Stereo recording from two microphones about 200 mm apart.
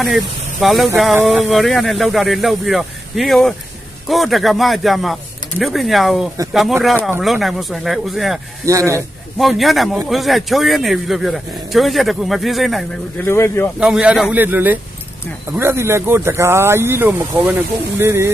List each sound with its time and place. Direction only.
0.6 s speech: centre (ahead or behind)
8.6 s speech: 15° right (ahead or behind)
9.4 s speech: centre (ahead or behind)
13.2 s speech: 15° left (ahead or behind)
13.7 s speech: 5° right (ahead or behind)